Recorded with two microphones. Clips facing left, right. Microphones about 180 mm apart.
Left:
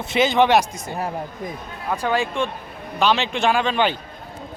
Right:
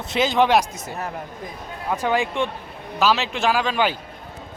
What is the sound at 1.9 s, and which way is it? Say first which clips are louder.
Speech: even; 15° right (ahead or behind).